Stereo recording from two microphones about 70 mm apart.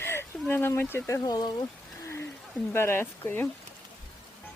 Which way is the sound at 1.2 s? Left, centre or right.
Left.